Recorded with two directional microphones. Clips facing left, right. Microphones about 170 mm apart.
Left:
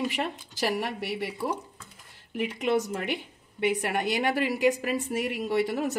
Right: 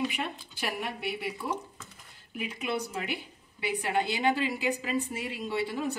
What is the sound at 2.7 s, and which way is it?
Speech, 45° left (ahead or behind).